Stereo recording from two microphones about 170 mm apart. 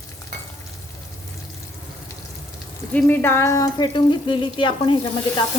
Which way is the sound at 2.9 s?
10° left (ahead or behind).